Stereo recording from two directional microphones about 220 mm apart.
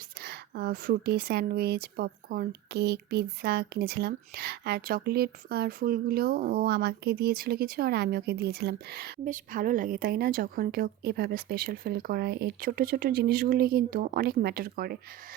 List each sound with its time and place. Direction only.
0.2 s speech: 45° right (ahead or behind)